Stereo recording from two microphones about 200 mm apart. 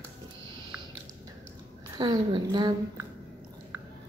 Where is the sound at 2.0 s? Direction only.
20° right (ahead or behind).